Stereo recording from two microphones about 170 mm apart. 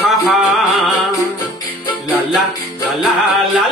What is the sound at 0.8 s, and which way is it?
Music, 15° left (ahead or behind).